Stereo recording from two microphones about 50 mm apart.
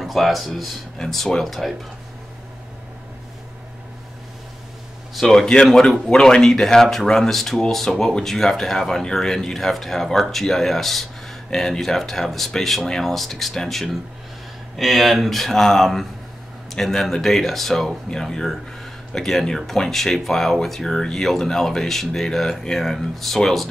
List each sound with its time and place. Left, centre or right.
0.0 s speech: centre
5.1 s speech: centre